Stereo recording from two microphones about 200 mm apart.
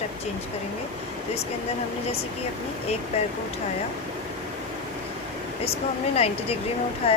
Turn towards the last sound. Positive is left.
turn(degrees=30)  # may be behind; listen again after turning